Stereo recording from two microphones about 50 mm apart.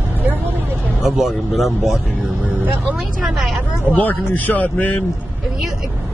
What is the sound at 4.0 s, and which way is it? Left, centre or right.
Speech, left.